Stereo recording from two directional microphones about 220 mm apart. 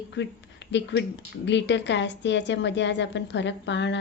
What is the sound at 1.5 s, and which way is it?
A woman's voice, 55° left (ahead or behind).